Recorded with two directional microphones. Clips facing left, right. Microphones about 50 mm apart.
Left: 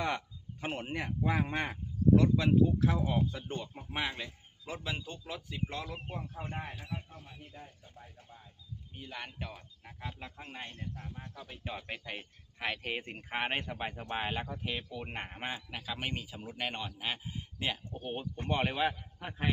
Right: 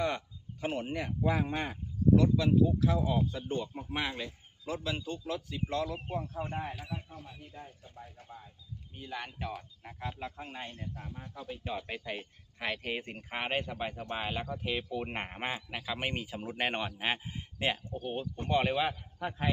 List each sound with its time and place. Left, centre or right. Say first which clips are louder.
0.6 s speech: right 2 dB; left
1.6 s speech: even; left
2.9 s speech: right 2 dB; left
3.4 s speech: right 5 dB; centre
4.6 s speech: right 3 dB; left
6.5 s speech: right 3 dB; centre
9.0 s speech: right 4 dB; centre
11.5 s speech: right 3 dB; centre
14.6 s speech: right 3 dB; centre
14.9 s a man's voice: right 4 dB; centre
16.2 s a man's voice: right 5 dB; right
18.0 s speech: right 1 dB; centre
18.6 s speech: right 1 dB; centre